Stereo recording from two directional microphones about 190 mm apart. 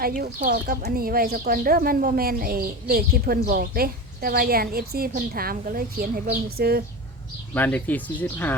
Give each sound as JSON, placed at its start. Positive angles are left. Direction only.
{"t": 0.0, "sound": "speech", "side_deg": -50}
{"t": 7.5, "sound": "speech", "side_deg": 10}